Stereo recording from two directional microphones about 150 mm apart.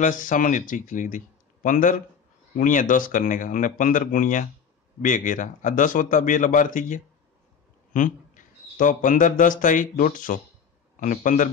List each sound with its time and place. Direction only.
0.0 s speech: 60° left (ahead or behind)